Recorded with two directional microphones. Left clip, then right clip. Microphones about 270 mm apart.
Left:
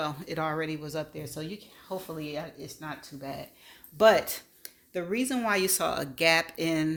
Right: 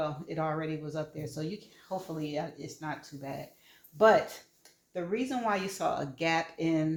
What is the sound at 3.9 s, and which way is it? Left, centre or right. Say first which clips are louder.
Speech: left 2 dB; left.